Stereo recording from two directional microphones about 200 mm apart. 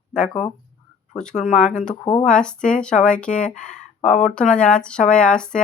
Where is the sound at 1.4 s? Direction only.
35° left (ahead or behind).